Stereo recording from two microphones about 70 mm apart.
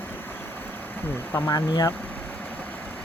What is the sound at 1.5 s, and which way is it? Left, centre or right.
Speech, left.